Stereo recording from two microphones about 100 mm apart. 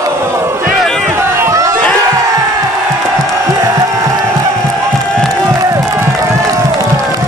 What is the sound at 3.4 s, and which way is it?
Music, 35° right (ahead or behind).